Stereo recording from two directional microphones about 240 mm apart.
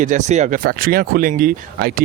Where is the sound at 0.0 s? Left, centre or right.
Right.